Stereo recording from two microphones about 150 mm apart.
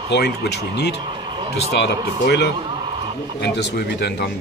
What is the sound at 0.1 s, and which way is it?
Speech, 90° left.